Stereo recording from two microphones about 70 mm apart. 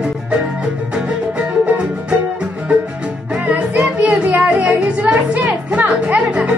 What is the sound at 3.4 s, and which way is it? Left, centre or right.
Music, right.